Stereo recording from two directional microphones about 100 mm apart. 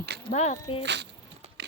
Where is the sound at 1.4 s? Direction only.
90° right.